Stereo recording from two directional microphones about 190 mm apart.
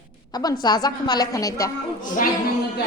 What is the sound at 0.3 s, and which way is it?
A woman's voice, 20° left (ahead or behind).